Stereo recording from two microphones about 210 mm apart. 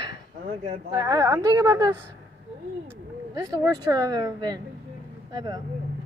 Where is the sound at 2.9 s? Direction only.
15° right (ahead or behind).